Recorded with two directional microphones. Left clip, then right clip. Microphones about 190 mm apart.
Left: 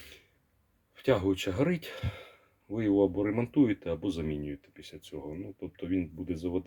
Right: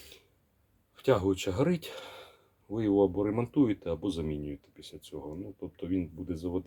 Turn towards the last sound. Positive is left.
turn(degrees=10)  # may be behind; listen again after turning